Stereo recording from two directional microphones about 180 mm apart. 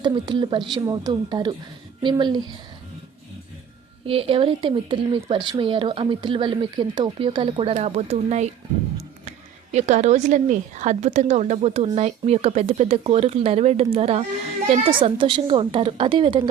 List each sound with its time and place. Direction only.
0.0 s speech: 25° right (ahead or behind)
4.0 s speech: 30° right (ahead or behind)
9.7 s a woman's voice: 40° right (ahead or behind)